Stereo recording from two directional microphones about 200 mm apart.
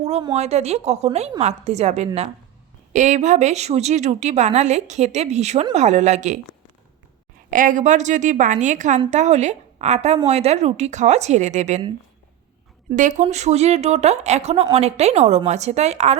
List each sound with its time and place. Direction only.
0.3 s speech: 30° right (ahead or behind)
7.5 s speech: 40° right (ahead or behind)
13.0 s speech: 40° right (ahead or behind)